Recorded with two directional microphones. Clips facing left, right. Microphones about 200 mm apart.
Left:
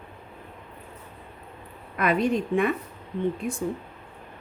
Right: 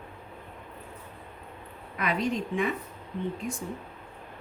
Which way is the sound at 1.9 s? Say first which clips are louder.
Left 6 dB; 55° left (ahead or behind).